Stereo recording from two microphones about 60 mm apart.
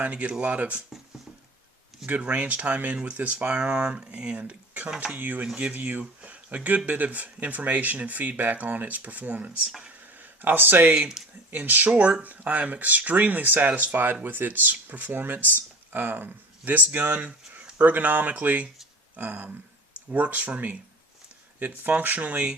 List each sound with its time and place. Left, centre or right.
0.0 s speech: right
2.0 s speech: right
10.9 s speech: centre